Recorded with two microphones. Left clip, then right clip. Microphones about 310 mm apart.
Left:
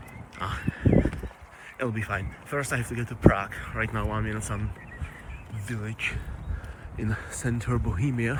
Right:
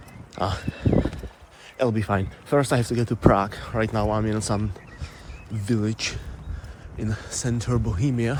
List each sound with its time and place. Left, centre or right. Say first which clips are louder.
0.3 s speech: right 5 dB; centre
0.9 s clip-clop: right 1 dB; left
1.8 s speech: right 7 dB; centre
5.6 s speech: right 11 dB; centre
6.9 s speech: right 3 dB; centre